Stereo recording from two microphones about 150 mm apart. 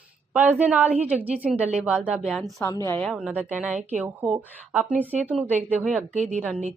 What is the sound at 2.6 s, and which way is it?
Speech, 20° left (ahead or behind).